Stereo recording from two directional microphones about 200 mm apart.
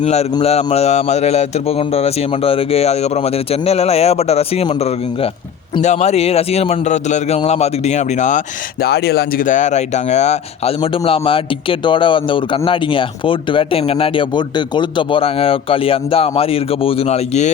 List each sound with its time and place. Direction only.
0.0 s speech: 35° left (ahead or behind)
8.8 s speech: 50° left (ahead or behind); by 17.5 s 35° left (ahead or behind)